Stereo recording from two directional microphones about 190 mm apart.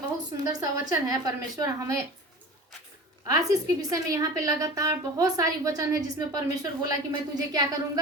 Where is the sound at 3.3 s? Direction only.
20° right (ahead or behind).